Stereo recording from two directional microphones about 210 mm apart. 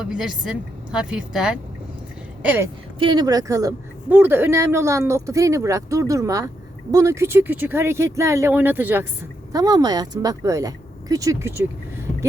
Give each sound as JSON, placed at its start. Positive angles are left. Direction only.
{"t": 0.0, "sound": "a woman's voice", "side_deg": -5}
{"t": 3.0, "sound": "a woman's voice", "side_deg": -20}